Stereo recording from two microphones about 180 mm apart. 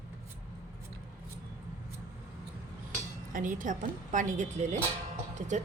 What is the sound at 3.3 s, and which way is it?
A woman's voice, 45° right (ahead or behind).